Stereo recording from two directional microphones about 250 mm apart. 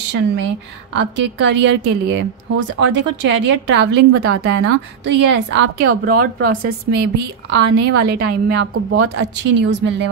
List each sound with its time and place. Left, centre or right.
0.9 s a woman's voice: right
5.9 s speech: right
6.6 s a woman's voice: right
8.0 s a woman's voice: right
8.9 s a woman's voice: right